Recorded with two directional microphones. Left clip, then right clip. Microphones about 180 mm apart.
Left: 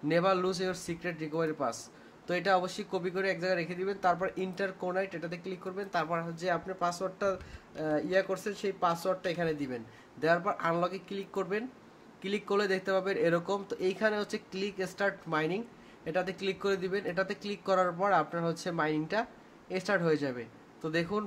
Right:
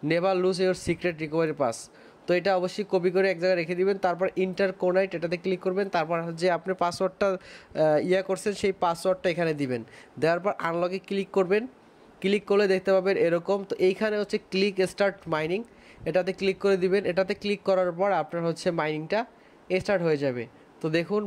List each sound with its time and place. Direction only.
0.1 s speech: 35° right (ahead or behind)